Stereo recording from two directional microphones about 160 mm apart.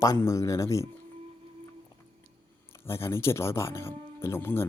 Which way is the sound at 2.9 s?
15° left (ahead or behind).